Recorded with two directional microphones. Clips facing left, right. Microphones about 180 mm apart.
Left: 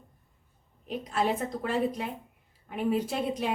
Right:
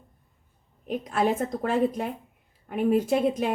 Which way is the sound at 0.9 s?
50° right (ahead or behind).